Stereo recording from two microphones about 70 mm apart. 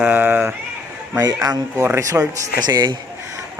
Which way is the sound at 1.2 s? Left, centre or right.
Right.